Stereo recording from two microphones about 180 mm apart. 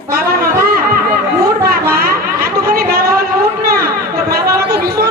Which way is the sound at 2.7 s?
55° right (ahead or behind).